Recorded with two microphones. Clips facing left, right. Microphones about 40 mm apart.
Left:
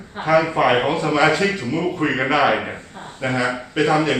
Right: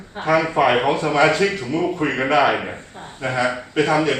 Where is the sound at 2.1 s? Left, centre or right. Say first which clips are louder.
Right 1 dB; left.